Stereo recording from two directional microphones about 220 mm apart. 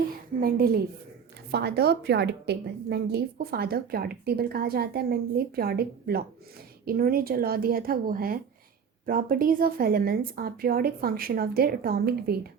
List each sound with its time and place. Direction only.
0.3 s a woman's voice: 40° right (ahead or behind)